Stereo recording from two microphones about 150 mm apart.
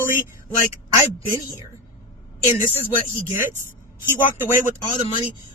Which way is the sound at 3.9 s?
15° right (ahead or behind).